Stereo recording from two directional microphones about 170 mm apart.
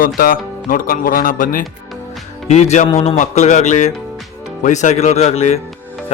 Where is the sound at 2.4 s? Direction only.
40° left (ahead or behind).